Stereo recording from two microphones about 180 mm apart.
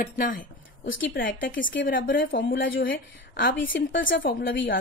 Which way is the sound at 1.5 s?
50° left (ahead or behind).